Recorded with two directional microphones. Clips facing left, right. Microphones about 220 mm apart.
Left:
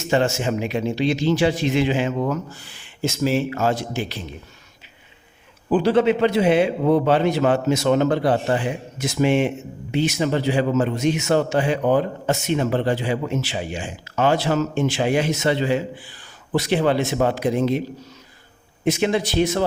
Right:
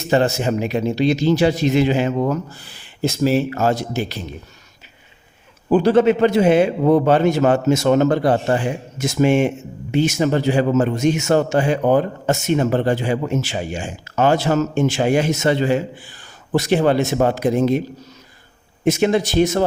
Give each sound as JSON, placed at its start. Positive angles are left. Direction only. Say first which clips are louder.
{"t": 0.0, "sound": "speech", "louder": "right 3 dB", "side_deg": -35}
{"t": 5.6, "sound": "a man's voice", "louder": "right 3 dB", "side_deg": -45}
{"t": 18.9, "sound": "a man's voice", "louder": "right 4 dB", "side_deg": -45}